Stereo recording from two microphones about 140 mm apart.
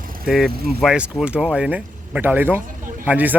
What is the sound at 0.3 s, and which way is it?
Speech, centre (ahead or behind).